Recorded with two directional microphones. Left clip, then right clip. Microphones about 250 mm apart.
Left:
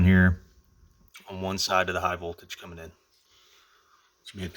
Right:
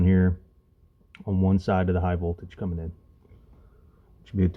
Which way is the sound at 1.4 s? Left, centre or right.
Left.